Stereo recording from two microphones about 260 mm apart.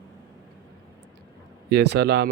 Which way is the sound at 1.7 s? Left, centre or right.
Right.